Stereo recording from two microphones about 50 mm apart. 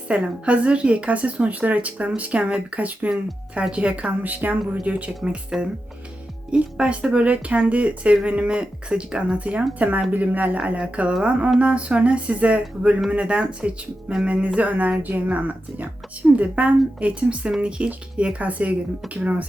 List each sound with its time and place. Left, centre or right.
0.1 s a woman's voice: right
4.2 s a woman's voice: right
6.5 s a woman's voice: right